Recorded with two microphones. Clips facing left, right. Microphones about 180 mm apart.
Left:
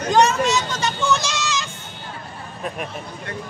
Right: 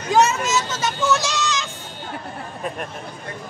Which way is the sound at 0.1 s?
5° right (ahead or behind).